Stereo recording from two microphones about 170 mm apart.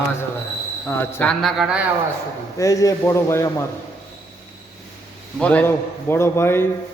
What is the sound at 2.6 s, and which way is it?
Speech, 20° left (ahead or behind).